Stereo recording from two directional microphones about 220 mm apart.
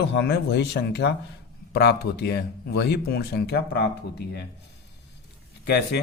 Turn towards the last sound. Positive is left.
turn(degrees=45)  # may be behind; listen again after turning